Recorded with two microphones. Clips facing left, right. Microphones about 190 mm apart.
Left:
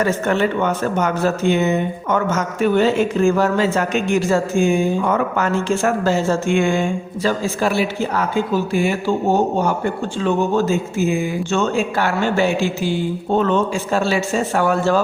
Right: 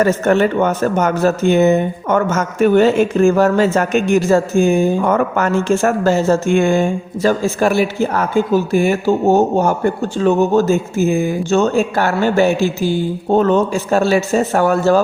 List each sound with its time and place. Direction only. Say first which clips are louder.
0.0 s speech: right 5 dB; 45° right (ahead or behind)